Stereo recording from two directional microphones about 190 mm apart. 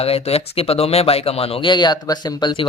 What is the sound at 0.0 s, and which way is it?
Speech, 30° left (ahead or behind).